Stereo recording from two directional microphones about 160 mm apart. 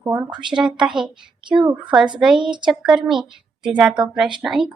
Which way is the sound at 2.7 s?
Centre (ahead or behind).